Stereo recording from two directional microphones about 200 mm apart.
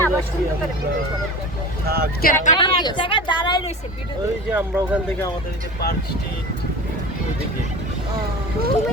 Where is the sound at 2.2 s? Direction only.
40° left (ahead or behind).